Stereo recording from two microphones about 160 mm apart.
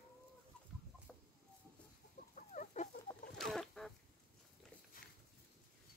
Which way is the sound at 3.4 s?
Centre (ahead or behind).